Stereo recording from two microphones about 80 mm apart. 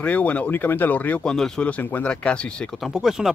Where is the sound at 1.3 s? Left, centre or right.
Centre.